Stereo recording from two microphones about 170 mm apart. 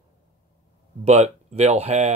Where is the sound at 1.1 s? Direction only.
40° right (ahead or behind).